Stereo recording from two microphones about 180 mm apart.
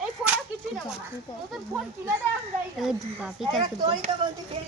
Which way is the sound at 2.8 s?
5° right (ahead or behind).